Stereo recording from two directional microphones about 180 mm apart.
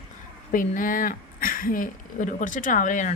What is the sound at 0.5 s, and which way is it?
Speech, 50° left (ahead or behind).